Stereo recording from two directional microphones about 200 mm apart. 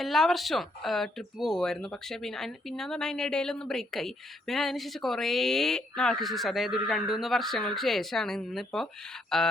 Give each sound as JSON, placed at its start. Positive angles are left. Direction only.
{"t": 0.0, "sound": "speech", "side_deg": 0}